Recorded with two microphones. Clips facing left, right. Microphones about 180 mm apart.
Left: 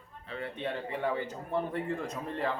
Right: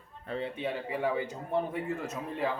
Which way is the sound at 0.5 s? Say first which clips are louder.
Right 1 dB; 10° right (ahead or behind).